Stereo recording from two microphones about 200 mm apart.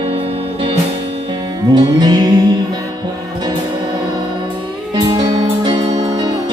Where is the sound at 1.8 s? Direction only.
20° right (ahead or behind).